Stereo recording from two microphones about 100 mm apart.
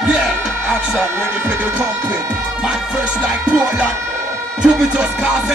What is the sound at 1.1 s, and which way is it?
Speech, 25° right (ahead or behind).